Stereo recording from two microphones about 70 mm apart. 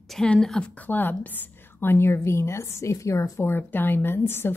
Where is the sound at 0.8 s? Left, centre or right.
Left.